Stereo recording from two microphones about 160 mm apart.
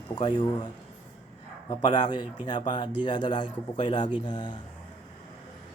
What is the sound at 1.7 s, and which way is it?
A man's voice, 30° left (ahead or behind).